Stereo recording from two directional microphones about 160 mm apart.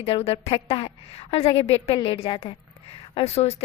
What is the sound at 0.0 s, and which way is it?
Speech, 40° left (ahead or behind).